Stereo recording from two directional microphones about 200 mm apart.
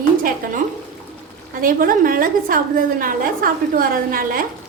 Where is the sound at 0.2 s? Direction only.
45° right (ahead or behind).